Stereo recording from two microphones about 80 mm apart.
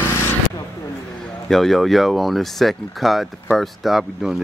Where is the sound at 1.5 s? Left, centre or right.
Centre.